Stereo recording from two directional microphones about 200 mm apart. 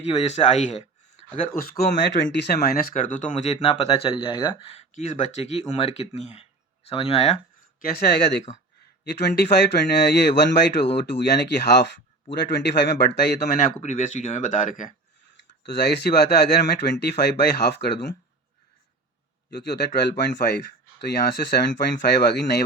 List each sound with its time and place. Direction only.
0.0 s speech: 30° left (ahead or behind)
1.5 s speech: 50° left (ahead or behind)
3.3 s speech: 30° left (ahead or behind)
7.8 s speech: 50° left (ahead or behind)
13.8 s speech: 40° left (ahead or behind)
15.6 s speech: 55° left (ahead or behind)
19.5 s speech: 60° left (ahead or behind)